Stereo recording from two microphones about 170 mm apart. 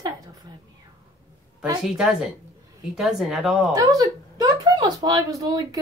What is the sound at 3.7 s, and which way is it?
Speech, 20° right (ahead or behind).